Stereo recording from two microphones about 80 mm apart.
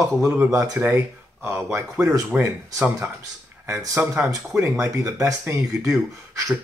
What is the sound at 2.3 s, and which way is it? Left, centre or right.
Speech, centre.